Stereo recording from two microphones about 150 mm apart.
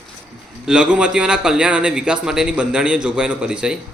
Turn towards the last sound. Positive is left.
turn(degrees=-5)  # may be behind; listen again after turning